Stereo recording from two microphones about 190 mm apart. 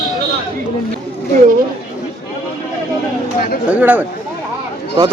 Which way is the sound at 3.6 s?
5° right (ahead or behind).